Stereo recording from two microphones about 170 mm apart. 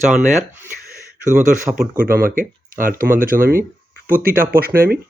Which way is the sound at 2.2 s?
55° right (ahead or behind).